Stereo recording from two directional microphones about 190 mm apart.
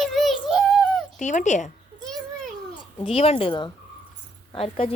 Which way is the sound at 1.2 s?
40° left (ahead or behind).